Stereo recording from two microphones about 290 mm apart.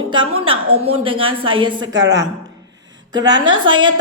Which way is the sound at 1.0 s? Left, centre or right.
Centre.